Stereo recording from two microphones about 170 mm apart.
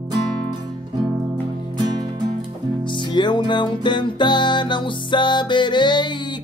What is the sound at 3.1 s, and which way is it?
Music, 25° left (ahead or behind).